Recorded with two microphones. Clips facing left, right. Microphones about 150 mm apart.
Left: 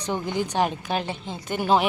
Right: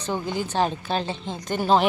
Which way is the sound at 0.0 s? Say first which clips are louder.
Left 1 dB; 20° left (ahead or behind).